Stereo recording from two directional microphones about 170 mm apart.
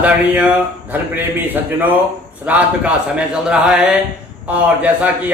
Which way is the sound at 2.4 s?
5° right (ahead or behind).